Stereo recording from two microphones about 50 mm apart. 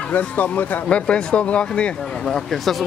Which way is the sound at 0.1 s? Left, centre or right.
Left.